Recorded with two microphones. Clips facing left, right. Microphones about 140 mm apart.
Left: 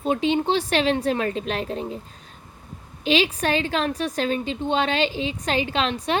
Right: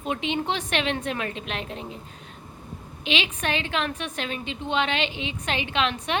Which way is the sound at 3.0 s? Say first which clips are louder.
Left 6 dB; 35° left (ahead or behind).